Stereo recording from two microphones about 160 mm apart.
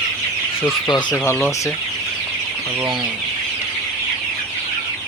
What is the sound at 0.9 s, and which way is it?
Speech, 25° left (ahead or behind).